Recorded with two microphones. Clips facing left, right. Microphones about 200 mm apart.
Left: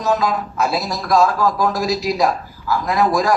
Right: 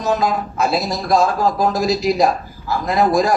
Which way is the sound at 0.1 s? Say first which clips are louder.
Even; 25° right (ahead or behind).